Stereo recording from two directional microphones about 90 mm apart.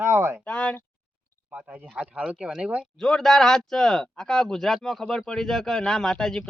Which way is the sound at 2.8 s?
5° left (ahead or behind).